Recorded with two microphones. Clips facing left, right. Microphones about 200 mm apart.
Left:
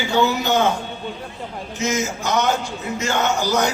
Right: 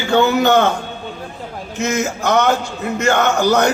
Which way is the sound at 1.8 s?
60° right (ahead or behind).